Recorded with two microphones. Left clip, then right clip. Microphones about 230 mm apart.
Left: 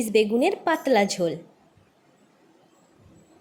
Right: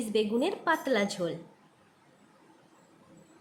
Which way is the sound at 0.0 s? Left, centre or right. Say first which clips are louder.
Left 8 dB; left.